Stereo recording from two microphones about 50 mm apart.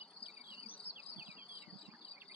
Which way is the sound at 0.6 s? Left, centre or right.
Right.